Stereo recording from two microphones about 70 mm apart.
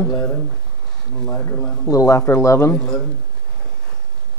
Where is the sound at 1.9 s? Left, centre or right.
Left.